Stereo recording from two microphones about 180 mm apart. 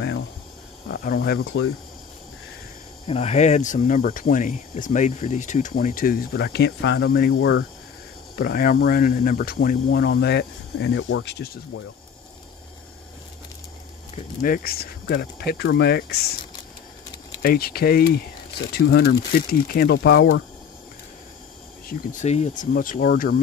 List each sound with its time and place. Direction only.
0.8 s speech: 55° left (ahead or behind); by 1.6 s 75° left (ahead or behind)
3.1 s speech: 35° left (ahead or behind); by 7.6 s 80° left
8.4 s speech: 55° left (ahead or behind)
14.4 s speech: 55° left (ahead or behind)
17.4 s speech: 60° left (ahead or behind); by 20.4 s 80° left
22.2 s speech: 35° left (ahead or behind)